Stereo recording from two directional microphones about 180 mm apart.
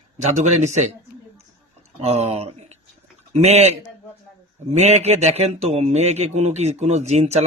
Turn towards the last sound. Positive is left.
turn(degrees=-40)  # may be behind; listen again after turning